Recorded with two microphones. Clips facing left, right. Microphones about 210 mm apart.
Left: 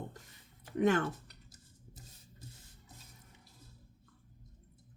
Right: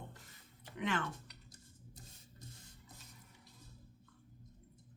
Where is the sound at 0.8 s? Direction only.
45° left (ahead or behind).